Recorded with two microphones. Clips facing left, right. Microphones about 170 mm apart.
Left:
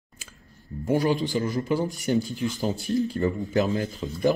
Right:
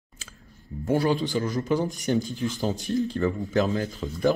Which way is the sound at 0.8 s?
15° left (ahead or behind).